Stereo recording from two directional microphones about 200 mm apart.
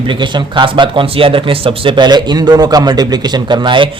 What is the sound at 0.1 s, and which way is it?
A man's voice, 25° right (ahead or behind).